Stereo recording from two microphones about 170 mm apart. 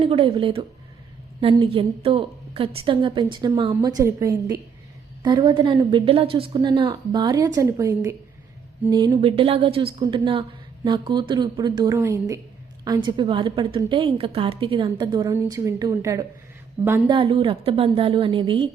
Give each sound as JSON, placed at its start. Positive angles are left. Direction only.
{"t": 0.0, "sound": "a woman's voice", "side_deg": -30}
{"t": 17.1, "sound": "a woman's voice", "side_deg": -30}